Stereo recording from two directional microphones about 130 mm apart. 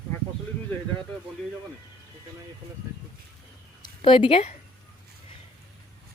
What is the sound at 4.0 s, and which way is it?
Speech, 40° left (ahead or behind).